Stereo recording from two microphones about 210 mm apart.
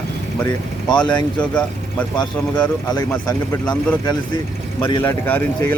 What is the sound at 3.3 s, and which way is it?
Speech, 10° left (ahead or behind).